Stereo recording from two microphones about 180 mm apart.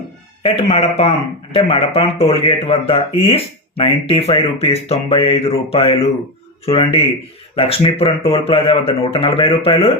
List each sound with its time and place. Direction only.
0.4 s speech: 35° left (ahead or behind)